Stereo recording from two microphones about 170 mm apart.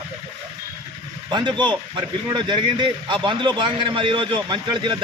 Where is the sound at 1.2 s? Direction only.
25° right (ahead or behind).